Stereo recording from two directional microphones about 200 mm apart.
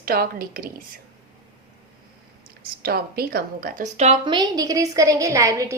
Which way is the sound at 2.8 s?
50° right (ahead or behind).